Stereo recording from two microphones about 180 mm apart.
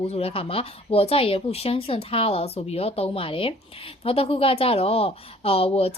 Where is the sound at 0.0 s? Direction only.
35° left (ahead or behind).